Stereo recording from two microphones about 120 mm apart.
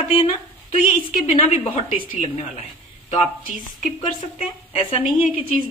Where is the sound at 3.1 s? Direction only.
75° left (ahead or behind).